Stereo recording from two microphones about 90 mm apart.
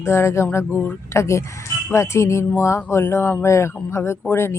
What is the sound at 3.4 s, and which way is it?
Speech, 30° left (ahead or behind).